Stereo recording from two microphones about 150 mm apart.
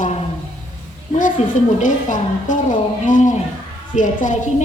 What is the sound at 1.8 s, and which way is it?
A woman's voice, 55° left (ahead or behind).